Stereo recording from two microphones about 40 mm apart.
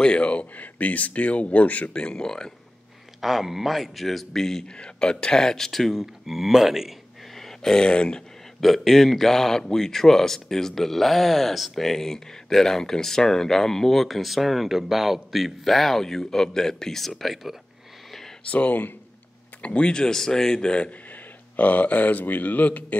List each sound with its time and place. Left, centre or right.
0.0 s speech: left
2.1 s speech: centre
3.2 s a man's voice: centre
5.7 s a man's voice: centre
7.3 s a sound: centre
7.8 s speech: left
8.5 s speech: centre
18.5 s speech: left; by 20.6 s centre
20.6 s speech: left
21.5 s a man's voice: left